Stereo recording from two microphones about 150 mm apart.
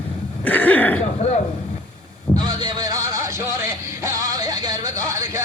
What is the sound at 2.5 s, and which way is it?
Music, 25° right (ahead or behind).